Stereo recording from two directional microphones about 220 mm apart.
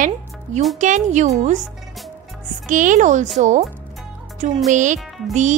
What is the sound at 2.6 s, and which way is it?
A woman's voice, 35° right (ahead or behind).